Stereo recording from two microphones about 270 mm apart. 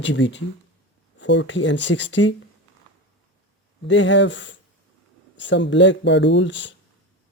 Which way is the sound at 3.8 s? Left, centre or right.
Left.